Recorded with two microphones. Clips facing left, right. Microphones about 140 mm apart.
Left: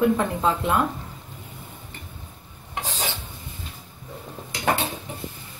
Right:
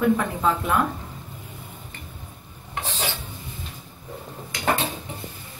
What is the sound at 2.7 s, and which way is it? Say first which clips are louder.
Stir: even; 10° left (ahead or behind).